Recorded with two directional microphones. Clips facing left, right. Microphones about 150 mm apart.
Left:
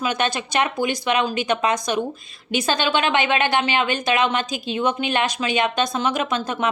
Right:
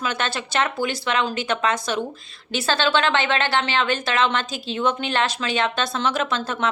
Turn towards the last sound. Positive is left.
turn(degrees=15)  # may be behind; listen again after turning